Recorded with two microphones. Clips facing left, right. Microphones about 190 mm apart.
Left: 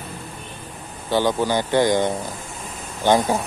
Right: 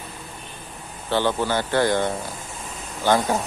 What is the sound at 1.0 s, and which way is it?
Speech, 15° left (ahead or behind).